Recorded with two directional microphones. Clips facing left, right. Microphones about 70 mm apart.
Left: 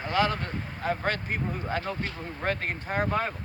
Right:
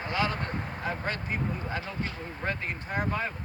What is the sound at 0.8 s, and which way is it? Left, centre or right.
Speech, left.